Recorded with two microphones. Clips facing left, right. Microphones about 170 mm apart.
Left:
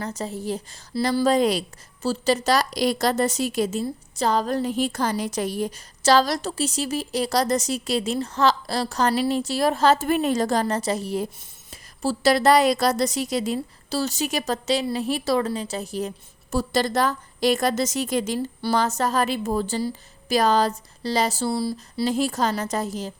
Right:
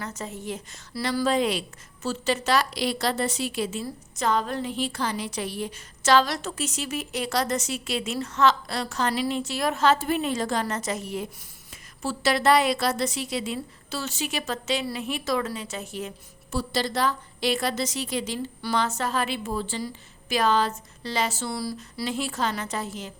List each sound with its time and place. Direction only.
0.0 s a woman's voice: 35° left (ahead or behind)